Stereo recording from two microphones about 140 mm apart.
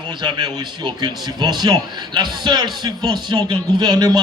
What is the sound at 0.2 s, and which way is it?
A man's voice, 30° right (ahead or behind).